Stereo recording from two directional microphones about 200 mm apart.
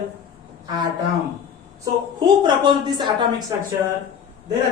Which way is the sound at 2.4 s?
20° right (ahead or behind).